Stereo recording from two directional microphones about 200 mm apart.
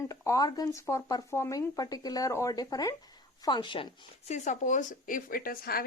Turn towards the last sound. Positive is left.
turn(degrees=50)  # may be behind; listen again after turning